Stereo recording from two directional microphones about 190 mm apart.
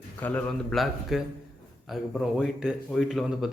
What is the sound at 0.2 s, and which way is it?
Speech, 10° left (ahead or behind).